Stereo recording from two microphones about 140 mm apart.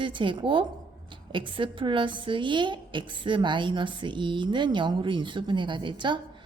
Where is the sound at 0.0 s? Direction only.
35° right (ahead or behind).